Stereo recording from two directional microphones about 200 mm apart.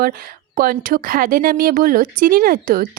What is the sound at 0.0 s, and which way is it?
Speech, 45° right (ahead or behind).